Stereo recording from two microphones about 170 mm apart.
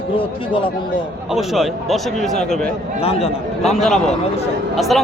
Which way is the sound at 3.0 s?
35° left (ahead or behind).